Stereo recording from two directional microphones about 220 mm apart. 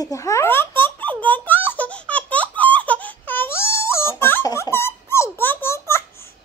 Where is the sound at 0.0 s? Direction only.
15° left (ahead or behind).